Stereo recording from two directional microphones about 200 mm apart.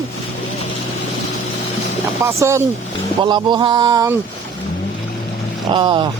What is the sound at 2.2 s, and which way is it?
Speech, 15° right (ahead or behind).